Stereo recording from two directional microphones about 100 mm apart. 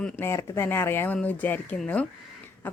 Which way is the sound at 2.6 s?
20° left (ahead or behind).